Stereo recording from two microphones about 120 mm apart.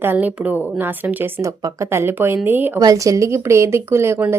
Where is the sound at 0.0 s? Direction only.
15° right (ahead or behind).